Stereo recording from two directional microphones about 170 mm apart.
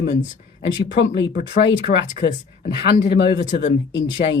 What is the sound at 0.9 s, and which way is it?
Speech, 90° left.